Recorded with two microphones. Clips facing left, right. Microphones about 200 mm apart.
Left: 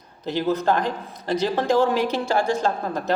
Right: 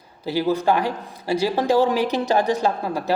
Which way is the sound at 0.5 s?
10° right (ahead or behind).